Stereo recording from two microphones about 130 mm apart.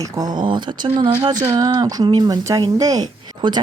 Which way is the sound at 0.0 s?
30° right (ahead or behind).